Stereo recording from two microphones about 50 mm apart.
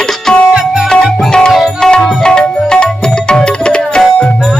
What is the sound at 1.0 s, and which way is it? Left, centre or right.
Music, centre.